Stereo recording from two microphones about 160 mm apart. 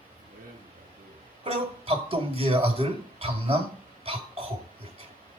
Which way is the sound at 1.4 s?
35° right (ahead or behind).